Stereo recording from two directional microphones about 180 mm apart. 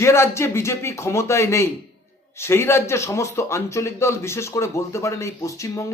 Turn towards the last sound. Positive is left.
turn(degrees=15)  # may be behind; listen again after turning